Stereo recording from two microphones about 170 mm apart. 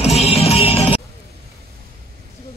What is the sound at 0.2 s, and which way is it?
Music, 35° left (ahead or behind).